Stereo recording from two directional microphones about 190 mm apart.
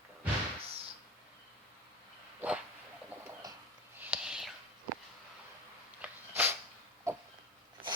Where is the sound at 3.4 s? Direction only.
20° right (ahead or behind).